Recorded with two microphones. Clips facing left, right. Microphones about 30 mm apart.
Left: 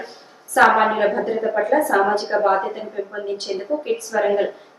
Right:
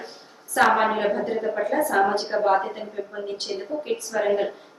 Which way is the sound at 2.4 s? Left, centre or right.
Centre.